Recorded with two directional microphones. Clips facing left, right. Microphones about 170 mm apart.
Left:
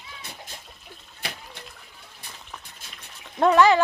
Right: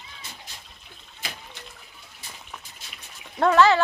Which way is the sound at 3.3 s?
15° left (ahead or behind).